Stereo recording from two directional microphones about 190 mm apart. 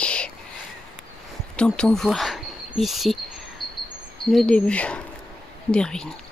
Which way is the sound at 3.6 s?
Centre (ahead or behind).